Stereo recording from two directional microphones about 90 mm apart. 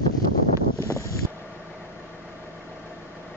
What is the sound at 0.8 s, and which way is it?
Wind, 35° left (ahead or behind).